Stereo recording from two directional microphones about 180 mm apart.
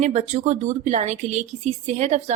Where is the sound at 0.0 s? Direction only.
40° right (ahead or behind).